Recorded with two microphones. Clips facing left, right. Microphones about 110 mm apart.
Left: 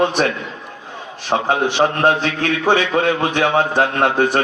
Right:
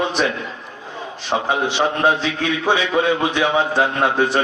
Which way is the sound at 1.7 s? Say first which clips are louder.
Left 2 dB; 50° left (ahead or behind).